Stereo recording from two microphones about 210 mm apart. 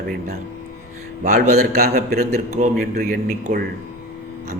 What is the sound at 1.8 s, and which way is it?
A man's voice, 45° right (ahead or behind).